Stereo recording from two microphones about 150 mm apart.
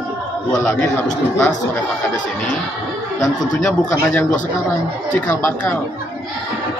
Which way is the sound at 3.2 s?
20° left (ahead or behind).